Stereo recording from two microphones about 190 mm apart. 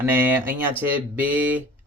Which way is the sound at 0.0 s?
10° right (ahead or behind).